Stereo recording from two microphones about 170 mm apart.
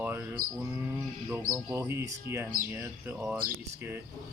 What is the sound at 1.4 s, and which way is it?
Speech, 15° right (ahead or behind).